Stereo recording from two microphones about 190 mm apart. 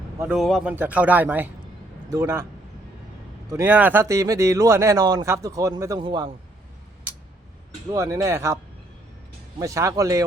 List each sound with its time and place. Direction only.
0.3 s speech: centre (ahead or behind); by 2.5 s 15° right (ahead or behind)
3.5 s speech: 10° right (ahead or behind); by 6.3 s 25° right (ahead or behind)
7.9 s speech: 15° right (ahead or behind)
9.6 s speech: 15° right (ahead or behind)